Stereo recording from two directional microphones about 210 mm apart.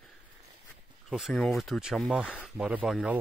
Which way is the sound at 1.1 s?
Centre (ahead or behind).